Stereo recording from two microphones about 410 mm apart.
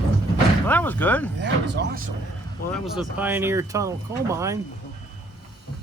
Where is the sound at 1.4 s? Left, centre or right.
Right.